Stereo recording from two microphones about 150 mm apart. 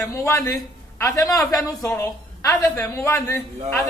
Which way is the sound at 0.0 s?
20° left (ahead or behind).